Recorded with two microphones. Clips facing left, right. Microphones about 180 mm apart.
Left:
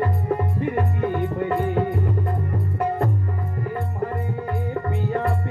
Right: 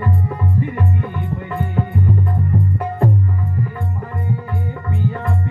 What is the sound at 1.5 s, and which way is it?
Music, 40° left (ahead or behind).